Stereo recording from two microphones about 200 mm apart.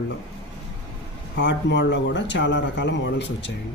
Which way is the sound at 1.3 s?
60° left (ahead or behind).